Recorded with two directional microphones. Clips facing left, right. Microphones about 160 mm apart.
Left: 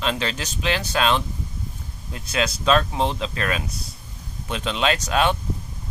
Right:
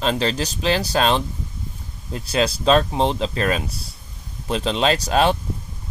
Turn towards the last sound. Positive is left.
turn(degrees=-35)  # may be behind; listen again after turning